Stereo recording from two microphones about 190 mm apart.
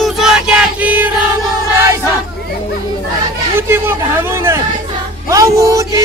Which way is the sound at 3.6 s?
10° right (ahead or behind).